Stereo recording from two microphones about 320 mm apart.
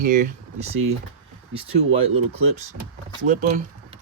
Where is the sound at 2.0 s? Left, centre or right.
Centre.